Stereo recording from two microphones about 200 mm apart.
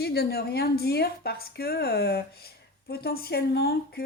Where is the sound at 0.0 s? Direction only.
50° left (ahead or behind).